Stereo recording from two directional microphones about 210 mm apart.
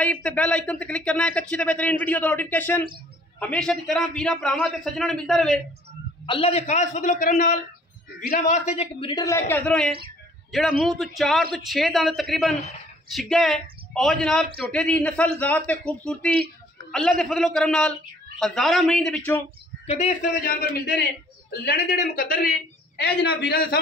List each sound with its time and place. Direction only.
0.0 s a man's voice: 5° left (ahead or behind)
6.2 s a man's voice: 25° left (ahead or behind)
9.1 s a man's voice: 15° left (ahead or behind)
19.9 s a man's voice: 30° left (ahead or behind)
20.4 s a man's voice: 50° left (ahead or behind)